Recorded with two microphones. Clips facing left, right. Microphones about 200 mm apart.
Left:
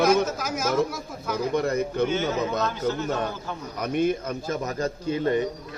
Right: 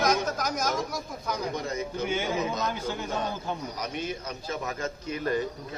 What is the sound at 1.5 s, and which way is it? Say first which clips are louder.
Speech: left 8 dB; 60° left (ahead or behind).